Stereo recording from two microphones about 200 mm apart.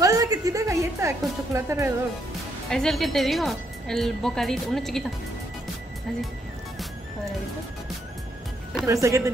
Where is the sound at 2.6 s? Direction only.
Centre (ahead or behind).